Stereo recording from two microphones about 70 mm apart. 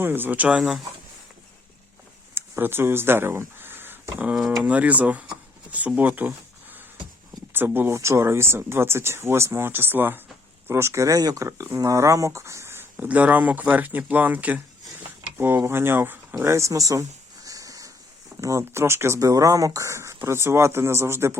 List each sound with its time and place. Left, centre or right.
0.0 s speech: right
2.3 s speech: right
4.4 s speech: centre
4.6 s speech: right
7.5 s speech: right
7.9 s speech: right
11.4 s speech: right
13.1 s speech: right
16.4 s a sound: right
18.3 s speech: right
19.2 s speech: right